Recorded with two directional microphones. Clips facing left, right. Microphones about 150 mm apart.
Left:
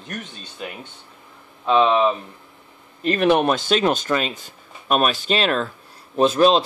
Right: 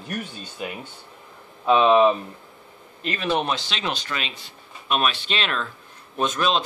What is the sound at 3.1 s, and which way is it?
Speech, 60° left (ahead or behind).